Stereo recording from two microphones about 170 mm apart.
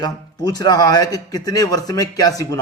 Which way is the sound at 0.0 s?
25° left (ahead or behind).